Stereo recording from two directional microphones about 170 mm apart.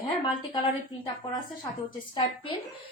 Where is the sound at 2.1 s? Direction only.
30° left (ahead or behind).